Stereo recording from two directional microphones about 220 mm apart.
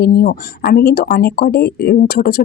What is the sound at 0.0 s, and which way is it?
Speech, 45° left (ahead or behind).